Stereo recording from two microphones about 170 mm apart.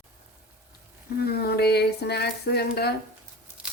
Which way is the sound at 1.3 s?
65° left (ahead or behind).